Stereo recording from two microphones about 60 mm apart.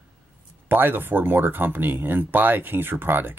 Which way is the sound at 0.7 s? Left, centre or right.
Right.